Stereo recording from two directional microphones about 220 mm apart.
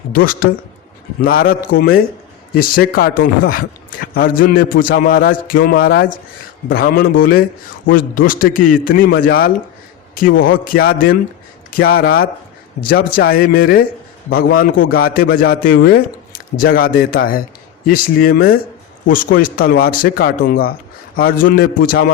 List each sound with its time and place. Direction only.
0.1 s a man's voice: 40° left (ahead or behind)